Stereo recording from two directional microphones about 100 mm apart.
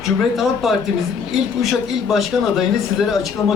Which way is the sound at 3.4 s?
30° left (ahead or behind).